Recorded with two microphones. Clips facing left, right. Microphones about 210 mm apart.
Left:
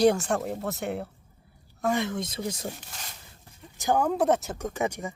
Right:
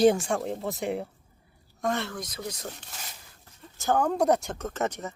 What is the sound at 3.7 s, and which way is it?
Speech, 15° left (ahead or behind).